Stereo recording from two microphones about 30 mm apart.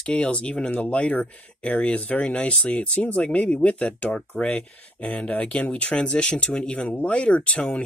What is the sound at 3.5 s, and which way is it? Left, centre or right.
Speech, left.